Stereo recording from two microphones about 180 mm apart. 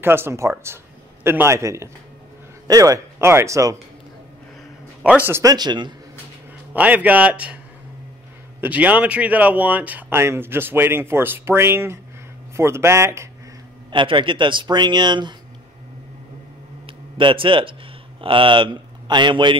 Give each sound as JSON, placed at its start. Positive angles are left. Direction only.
{"t": 0.0, "sound": "a man's voice", "side_deg": -10}
{"t": 5.0, "sound": "speech", "side_deg": -10}
{"t": 6.7, "sound": "a man's voice", "side_deg": -10}
{"t": 8.5, "sound": "a man's voice", "side_deg": -10}
{"t": 13.9, "sound": "speech", "side_deg": -25}
{"t": 16.8, "sound": "a sound", "side_deg": -30}
{"t": 18.2, "sound": "a man's voice", "side_deg": -30}